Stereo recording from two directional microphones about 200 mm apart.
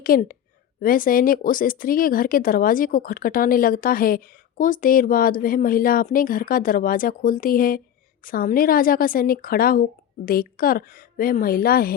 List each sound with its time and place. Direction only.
0.0 s speech: 45° left (ahead or behind)